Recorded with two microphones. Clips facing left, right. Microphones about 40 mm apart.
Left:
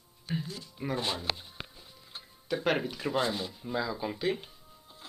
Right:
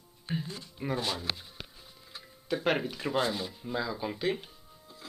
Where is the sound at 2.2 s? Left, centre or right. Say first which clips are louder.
Even; centre.